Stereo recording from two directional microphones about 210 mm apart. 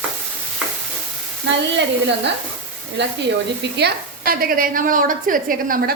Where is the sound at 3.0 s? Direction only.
55° right (ahead or behind).